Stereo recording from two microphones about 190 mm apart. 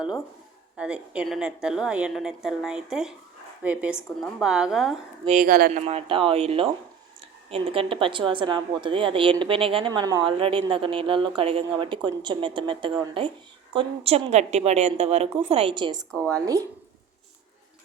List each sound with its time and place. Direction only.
0.8 s a woman's voice: 5° right (ahead or behind)
5.4 s speech: 50° right (ahead or behind)
5.8 s a woman's voice: 30° right (ahead or behind)
16.0 s a woman's voice: 5° left (ahead or behind)
16.3 s speech: 15° right (ahead or behind)